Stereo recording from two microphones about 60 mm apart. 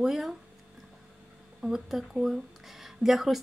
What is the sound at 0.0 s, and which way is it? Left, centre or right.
Speech, centre.